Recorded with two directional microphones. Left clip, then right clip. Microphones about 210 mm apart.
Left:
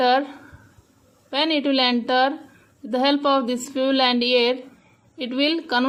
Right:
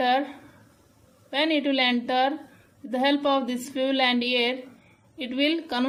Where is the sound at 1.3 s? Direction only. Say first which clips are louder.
Left 3 dB; 35° left (ahead or behind).